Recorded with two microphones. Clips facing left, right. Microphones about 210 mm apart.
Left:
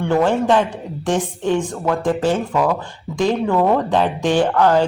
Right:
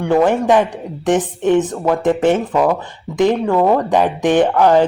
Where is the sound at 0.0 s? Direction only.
15° right (ahead or behind).